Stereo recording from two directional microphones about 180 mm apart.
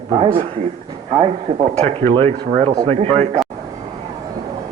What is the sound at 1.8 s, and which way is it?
Speech, 30° right (ahead or behind).